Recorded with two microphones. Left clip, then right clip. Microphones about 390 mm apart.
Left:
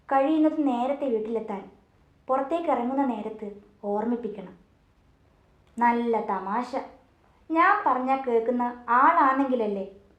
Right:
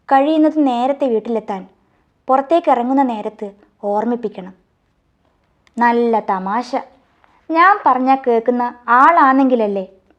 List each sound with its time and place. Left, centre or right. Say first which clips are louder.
0.0 s a woman's voice: right 10 dB; right
2.2 s a woman's voice: right 12 dB; right
3.8 s speech: right 10 dB; right
5.7 s a woman's voice: right 9 dB; right